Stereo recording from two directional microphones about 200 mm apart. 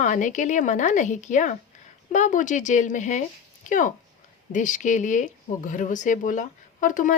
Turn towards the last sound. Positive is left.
turn(degrees=40)  # may be behind; listen again after turning